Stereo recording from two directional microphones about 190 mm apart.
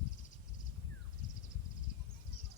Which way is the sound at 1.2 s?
40° left (ahead or behind).